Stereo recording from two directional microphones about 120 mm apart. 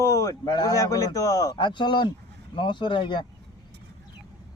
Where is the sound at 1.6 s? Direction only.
40° left (ahead or behind).